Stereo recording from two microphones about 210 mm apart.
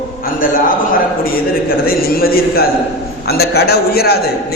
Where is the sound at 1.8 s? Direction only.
45° left (ahead or behind).